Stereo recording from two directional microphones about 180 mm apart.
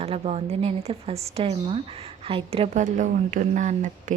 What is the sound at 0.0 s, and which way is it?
Speech, 35° right (ahead or behind).